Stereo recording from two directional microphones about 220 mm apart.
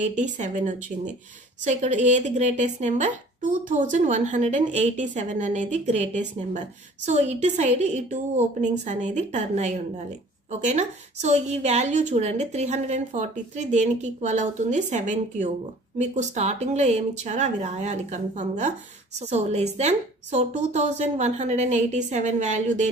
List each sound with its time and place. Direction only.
0.0 s speech: 35° right (ahead or behind)